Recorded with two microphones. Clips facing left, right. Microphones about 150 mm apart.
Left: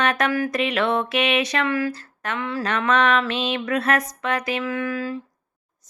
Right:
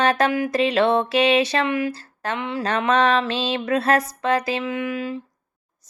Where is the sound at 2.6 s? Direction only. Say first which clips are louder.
Right 2 dB; 30° right (ahead or behind).